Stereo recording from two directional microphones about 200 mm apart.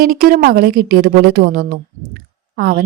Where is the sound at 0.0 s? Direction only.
45° right (ahead or behind).